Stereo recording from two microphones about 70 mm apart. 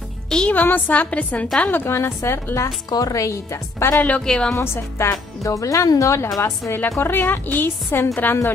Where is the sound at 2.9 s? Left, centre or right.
Left.